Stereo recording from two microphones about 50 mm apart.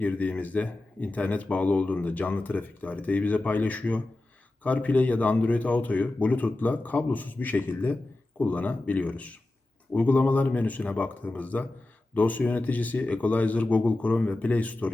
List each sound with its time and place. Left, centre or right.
0.0 s speech: left